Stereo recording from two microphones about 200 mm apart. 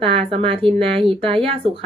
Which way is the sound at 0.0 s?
25° right (ahead or behind).